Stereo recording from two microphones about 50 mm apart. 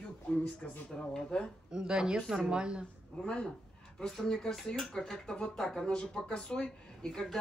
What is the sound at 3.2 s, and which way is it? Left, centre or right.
A woman's voice, left.